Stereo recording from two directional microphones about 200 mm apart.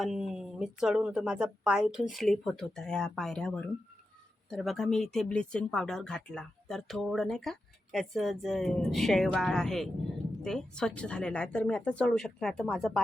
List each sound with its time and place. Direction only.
0.0 s speech: centre (ahead or behind)